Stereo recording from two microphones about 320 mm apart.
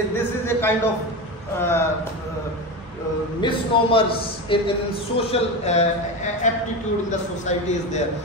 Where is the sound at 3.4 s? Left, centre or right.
Centre.